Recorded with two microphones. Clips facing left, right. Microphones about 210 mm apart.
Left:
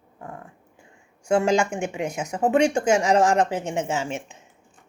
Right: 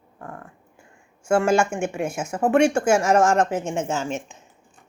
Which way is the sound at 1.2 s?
15° left (ahead or behind).